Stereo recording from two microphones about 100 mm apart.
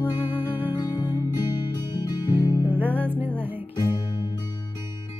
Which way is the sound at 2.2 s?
20° right (ahead or behind).